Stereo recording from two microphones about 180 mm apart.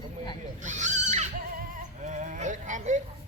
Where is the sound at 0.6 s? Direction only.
40° right (ahead or behind).